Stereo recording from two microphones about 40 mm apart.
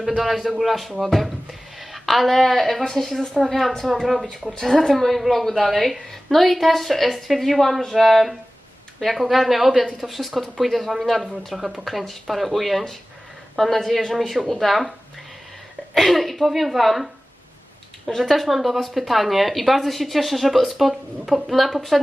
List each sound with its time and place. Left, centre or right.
0.2 s a woman's voice: centre
4.4 s speech: centre
4.8 s speech: centre
16.0 s speech: centre
18.2 s speech: centre